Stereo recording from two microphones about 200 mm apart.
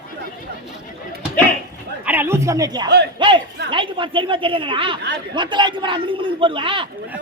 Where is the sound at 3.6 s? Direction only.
25° right (ahead or behind).